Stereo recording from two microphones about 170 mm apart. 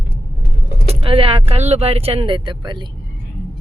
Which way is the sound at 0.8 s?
35° right (ahead or behind).